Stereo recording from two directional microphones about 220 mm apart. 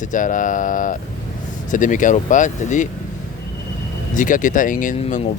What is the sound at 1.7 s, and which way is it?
Speech, 35° left (ahead or behind).